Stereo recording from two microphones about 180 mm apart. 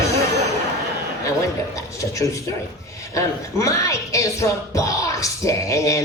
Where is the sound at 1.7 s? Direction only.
15° left (ahead or behind).